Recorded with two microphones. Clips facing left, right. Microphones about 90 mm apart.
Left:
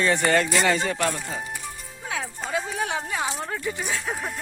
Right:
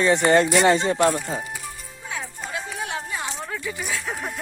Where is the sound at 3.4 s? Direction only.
35° left (ahead or behind).